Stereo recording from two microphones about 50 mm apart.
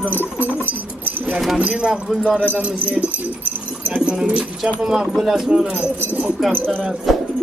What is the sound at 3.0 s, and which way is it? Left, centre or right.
Speech, centre.